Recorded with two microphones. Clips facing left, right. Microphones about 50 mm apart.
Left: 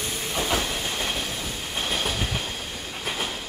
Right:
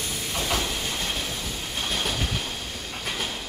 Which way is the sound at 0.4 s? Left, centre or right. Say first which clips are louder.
Left 2 dB; centre.